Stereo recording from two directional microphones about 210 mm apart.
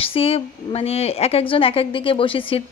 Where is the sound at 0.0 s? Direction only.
25° left (ahead or behind).